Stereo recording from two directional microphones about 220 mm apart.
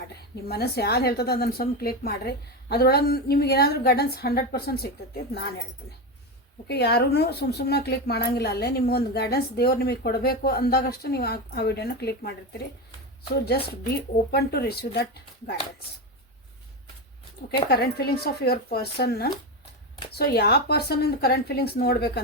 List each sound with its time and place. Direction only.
0.4 s a woman's voice: 45° left (ahead or behind)
6.7 s a woman's voice: 50° left (ahead or behind)
13.3 s a woman's voice: 45° left (ahead or behind)
17.5 s a woman's voice: 45° left (ahead or behind)